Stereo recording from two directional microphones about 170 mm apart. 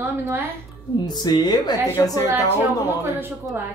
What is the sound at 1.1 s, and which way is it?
Speech, 25° left (ahead or behind).